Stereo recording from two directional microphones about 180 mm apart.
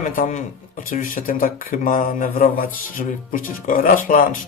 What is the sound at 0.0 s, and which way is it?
Speech, 45° left (ahead or behind).